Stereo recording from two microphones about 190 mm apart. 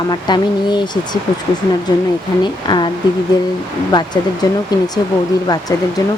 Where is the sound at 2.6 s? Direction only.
25° left (ahead or behind).